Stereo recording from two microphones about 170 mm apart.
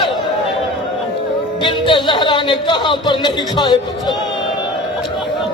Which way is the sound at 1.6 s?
30° left (ahead or behind).